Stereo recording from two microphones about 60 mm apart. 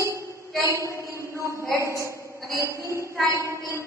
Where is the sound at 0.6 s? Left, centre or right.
Right.